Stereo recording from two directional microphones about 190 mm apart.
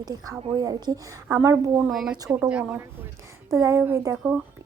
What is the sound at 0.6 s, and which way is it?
Speech, 20° right (ahead or behind).